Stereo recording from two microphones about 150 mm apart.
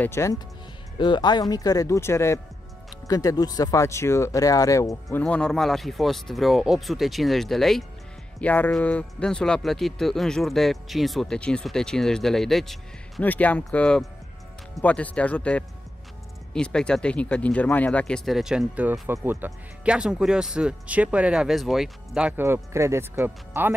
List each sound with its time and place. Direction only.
0.0 s speech: 20° left (ahead or behind)
0.9 s speech: 30° left (ahead or behind)
5.2 s speech: 5° left (ahead or behind); by 23.7 s 15° right (ahead or behind)